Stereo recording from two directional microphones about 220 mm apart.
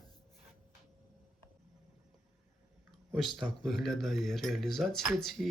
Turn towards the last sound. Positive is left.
turn(degrees=0)  # may be behind; listen again after turning